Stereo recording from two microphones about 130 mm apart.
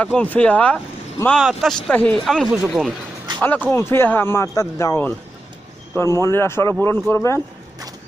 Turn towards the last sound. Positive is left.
turn(degrees=20)  # may be behind; listen again after turning